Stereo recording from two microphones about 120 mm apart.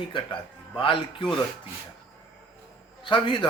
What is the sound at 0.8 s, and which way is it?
Speech, 45° left (ahead or behind).